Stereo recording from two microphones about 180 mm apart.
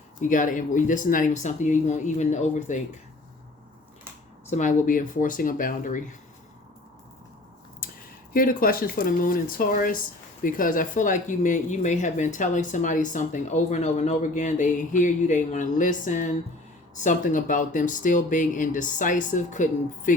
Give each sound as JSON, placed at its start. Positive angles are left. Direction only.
{"t": 0.2, "sound": "speech", "side_deg": 45}
{"t": 4.5, "sound": "speech", "side_deg": 45}
{"t": 7.8, "sound": "a sound", "side_deg": 50}
{"t": 8.3, "sound": "speech", "side_deg": 50}